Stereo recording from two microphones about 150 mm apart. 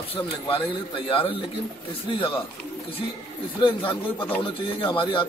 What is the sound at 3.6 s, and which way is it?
Speech, 35° left (ahead or behind).